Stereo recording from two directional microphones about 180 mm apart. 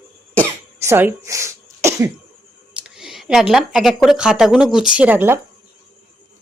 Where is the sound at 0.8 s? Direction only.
15° right (ahead or behind).